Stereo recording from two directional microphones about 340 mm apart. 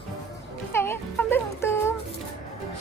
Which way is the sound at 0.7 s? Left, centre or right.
Centre.